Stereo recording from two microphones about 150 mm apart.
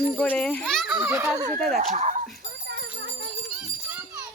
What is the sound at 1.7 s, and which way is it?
Speech, 50° right (ahead or behind).